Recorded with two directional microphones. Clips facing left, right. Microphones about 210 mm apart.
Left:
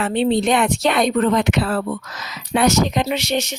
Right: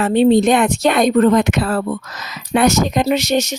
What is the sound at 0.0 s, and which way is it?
A woman's voice, 40° right (ahead or behind).